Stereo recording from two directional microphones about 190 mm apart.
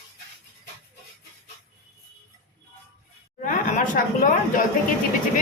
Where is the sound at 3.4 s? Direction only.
45° left (ahead or behind).